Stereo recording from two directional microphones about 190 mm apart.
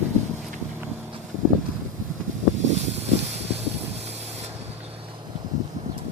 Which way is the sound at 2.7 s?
35° right (ahead or behind).